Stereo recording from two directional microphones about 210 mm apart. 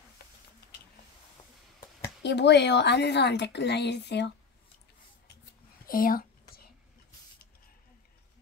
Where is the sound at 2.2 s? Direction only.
55° left (ahead or behind).